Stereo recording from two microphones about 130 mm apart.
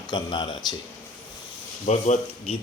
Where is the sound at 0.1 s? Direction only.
35° left (ahead or behind).